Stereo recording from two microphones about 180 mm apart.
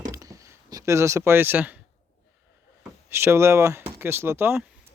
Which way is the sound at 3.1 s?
15° right (ahead or behind).